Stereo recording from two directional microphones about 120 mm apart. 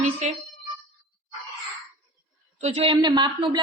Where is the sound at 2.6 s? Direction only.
60° right (ahead or behind).